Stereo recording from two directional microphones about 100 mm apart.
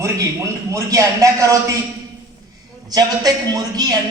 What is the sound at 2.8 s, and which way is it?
Speech, 40° right (ahead or behind).